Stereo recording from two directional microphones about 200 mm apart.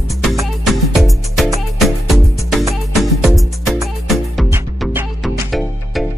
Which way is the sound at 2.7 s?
Centre (ahead or behind).